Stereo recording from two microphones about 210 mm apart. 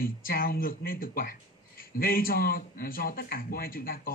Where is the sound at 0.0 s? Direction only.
45° left (ahead or behind).